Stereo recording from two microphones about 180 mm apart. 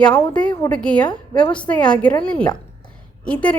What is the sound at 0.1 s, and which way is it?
A woman's voice, 10° left (ahead or behind).